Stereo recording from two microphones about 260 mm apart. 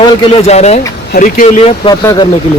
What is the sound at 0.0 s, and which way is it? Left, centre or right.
Speech, left.